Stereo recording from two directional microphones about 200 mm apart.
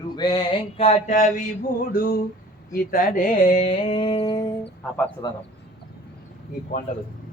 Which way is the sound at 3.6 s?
30° left (ahead or behind).